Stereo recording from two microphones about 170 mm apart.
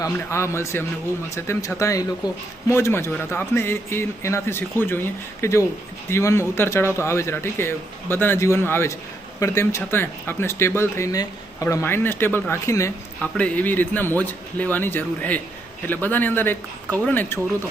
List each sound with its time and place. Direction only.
0.0 s speech: 15° left (ahead or behind)